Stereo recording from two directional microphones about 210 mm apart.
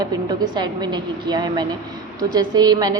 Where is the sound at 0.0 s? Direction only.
20° right (ahead or behind).